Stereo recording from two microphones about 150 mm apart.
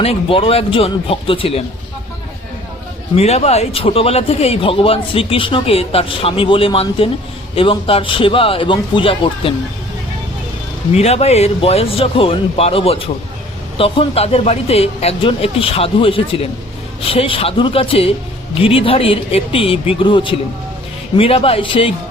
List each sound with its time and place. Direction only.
0.0 s a man's voice: 40° left (ahead or behind)
3.2 s a man's voice: 45° left (ahead or behind)
10.9 s a man's voice: 45° left (ahead or behind)